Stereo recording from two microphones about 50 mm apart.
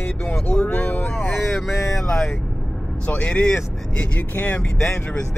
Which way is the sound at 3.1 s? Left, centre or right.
Left.